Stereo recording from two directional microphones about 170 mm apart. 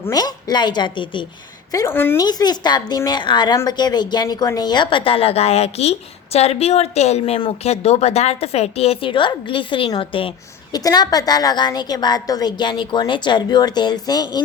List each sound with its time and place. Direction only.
0.0 s speech: 25° left (ahead or behind)
1.7 s speech: 15° left (ahead or behind)
2.2 s speech: 25° left (ahead or behind)